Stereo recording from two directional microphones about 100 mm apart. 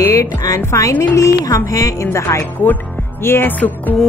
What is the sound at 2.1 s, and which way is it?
Speech, 30° left (ahead or behind).